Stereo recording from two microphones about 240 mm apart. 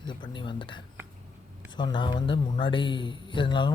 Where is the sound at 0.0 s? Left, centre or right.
Centre.